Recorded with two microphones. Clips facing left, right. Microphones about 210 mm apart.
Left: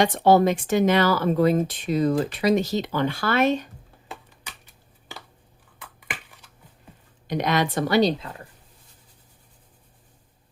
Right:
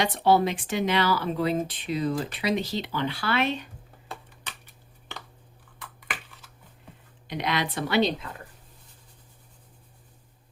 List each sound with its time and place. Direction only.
0.0 s speech: 45° left (ahead or behind)
7.3 s speech: 45° left (ahead or behind)